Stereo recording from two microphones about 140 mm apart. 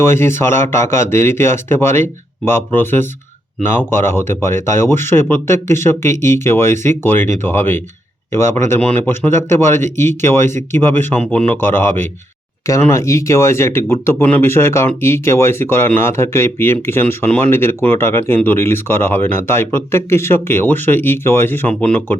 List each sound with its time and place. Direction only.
0.0 s speech: 15° left (ahead or behind)